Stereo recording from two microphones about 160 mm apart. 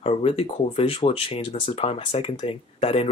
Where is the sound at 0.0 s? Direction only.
35° left (ahead or behind).